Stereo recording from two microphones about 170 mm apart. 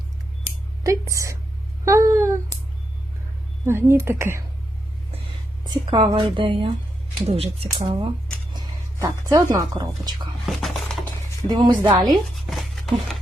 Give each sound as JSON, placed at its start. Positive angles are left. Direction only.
{"t": 0.9, "sound": "speech", "side_deg": -20}
{"t": 3.7, "sound": "speech", "side_deg": -15}
{"t": 5.6, "sound": "a woman's voice", "side_deg": -25}
{"t": 8.5, "sound": "speech", "side_deg": -20}
{"t": 10.4, "sound": "a sound", "side_deg": 0}
{"t": 11.4, "sound": "a woman's voice", "side_deg": -25}
{"t": 12.3, "sound": "a sound", "side_deg": 0}